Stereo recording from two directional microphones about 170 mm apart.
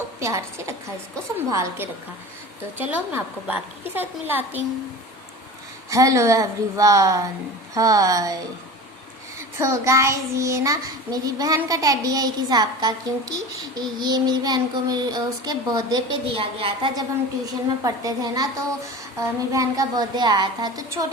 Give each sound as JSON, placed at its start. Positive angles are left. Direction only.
{"t": 0.2, "sound": "a woman's voice", "side_deg": -15}
{"t": 5.9, "sound": "a child's voice", "side_deg": -20}
{"t": 9.6, "sound": "a child's voice", "side_deg": -15}